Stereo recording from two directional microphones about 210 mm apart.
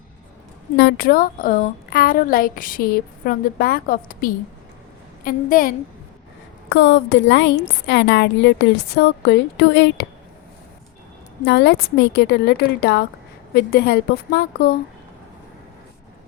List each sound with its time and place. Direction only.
0.8 s a woman's voice: 45° left (ahead or behind)
6.7 s a woman's voice: 60° left (ahead or behind)
11.4 s a woman's voice: 55° left (ahead or behind)